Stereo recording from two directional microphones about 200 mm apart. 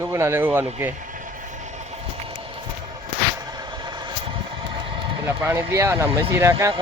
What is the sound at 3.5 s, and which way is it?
Vehicle, 20° right (ahead or behind).